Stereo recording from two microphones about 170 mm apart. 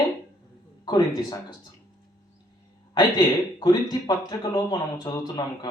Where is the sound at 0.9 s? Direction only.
25° left (ahead or behind).